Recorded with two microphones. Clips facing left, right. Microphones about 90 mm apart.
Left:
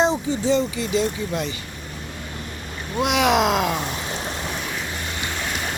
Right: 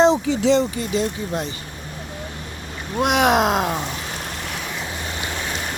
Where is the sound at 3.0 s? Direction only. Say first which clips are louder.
Right 2 dB; 45° right (ahead or behind).